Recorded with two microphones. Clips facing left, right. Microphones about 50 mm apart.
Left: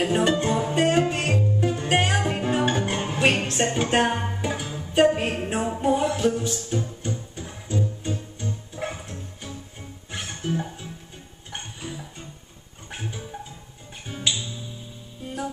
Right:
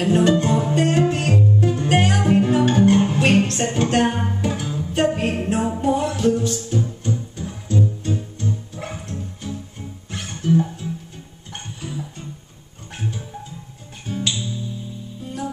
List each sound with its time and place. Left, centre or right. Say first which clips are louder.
0.0 s music: right 4 dB; centre
14.0 s music: right 3 dB; centre